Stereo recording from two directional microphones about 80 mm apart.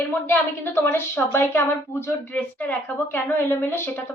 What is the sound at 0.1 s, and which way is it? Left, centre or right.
A woman's voice, left.